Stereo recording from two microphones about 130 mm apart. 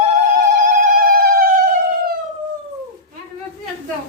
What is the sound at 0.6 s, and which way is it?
Siren, 85° right.